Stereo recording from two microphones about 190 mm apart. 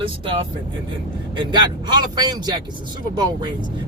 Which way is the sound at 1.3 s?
25° right (ahead or behind).